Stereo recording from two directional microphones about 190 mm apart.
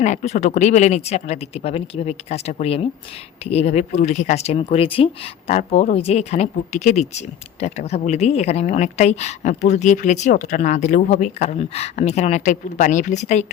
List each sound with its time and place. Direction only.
0.0 s speech: 40° left (ahead or behind)